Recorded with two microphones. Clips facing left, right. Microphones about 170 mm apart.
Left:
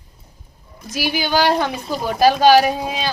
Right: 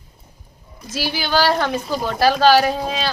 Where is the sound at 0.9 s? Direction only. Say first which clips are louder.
Left 1 dB; 15° left (ahead or behind).